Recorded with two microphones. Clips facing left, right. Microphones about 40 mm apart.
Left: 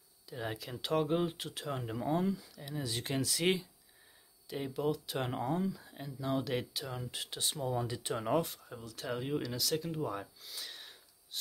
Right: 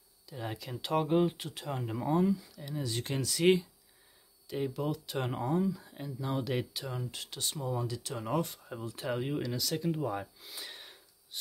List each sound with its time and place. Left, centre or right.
0.3 s speech: centre
7.8 s speech: left
8.5 s speech: centre